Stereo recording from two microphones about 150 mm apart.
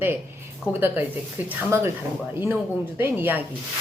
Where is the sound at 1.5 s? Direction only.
15° right (ahead or behind).